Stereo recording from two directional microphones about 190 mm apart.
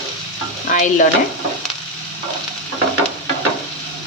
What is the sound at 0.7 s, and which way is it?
Speech, 40° left (ahead or behind).